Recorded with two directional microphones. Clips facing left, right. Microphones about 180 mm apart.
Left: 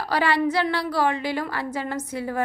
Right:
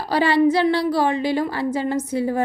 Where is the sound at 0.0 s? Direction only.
25° right (ahead or behind).